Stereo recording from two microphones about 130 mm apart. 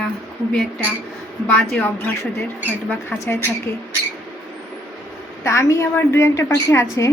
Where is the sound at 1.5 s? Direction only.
5° left (ahead or behind).